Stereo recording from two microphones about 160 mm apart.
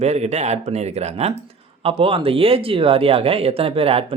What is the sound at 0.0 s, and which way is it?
Speech, 45° right (ahead or behind).